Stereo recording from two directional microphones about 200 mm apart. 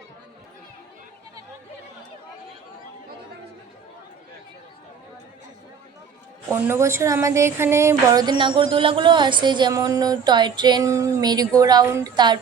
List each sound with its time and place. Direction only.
6.5 s a woman's voice: 15° right (ahead or behind)